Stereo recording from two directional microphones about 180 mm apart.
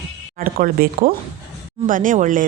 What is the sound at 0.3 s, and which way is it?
A woman's voice, 50° right (ahead or behind).